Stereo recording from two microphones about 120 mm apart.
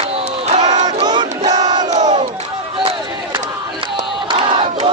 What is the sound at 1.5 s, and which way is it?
Crowd, 35° right (ahead or behind).